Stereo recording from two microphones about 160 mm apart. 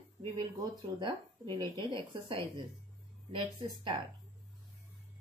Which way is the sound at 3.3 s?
30° right (ahead or behind).